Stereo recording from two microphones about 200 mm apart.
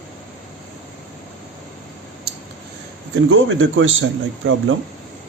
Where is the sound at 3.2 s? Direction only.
75° right (ahead or behind).